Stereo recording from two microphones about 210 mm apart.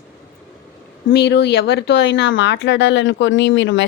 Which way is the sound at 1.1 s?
50° left (ahead or behind).